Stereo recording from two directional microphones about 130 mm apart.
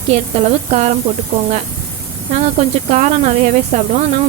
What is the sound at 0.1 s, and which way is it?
Speech, 55° right (ahead or behind).